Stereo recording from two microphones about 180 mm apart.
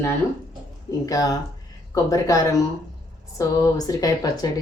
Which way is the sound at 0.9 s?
20° left (ahead or behind).